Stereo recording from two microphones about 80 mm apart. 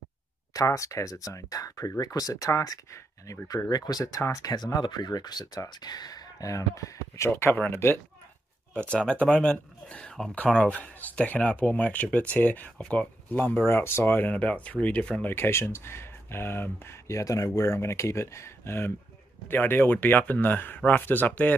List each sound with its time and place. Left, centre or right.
0.5 s speech: left
3.4 s speech: left
4.8 s speech: left
7.3 s speech: left
8.9 s speech: centre
15.2 s speech: left
17.2 s speech: left